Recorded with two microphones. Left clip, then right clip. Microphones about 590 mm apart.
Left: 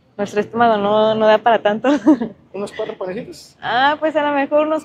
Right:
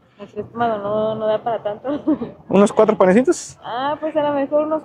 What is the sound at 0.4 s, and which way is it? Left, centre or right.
Speech, left.